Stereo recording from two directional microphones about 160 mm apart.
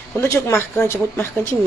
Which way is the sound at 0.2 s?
15° left (ahead or behind).